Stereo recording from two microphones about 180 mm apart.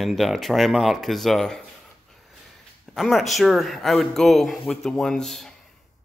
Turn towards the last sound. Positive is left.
turn(degrees=0)  # may be behind; listen again after turning